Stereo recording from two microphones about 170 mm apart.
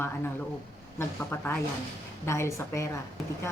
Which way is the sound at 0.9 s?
15° left (ahead or behind).